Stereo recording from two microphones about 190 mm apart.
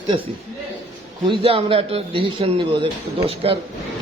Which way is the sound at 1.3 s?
30° right (ahead or behind).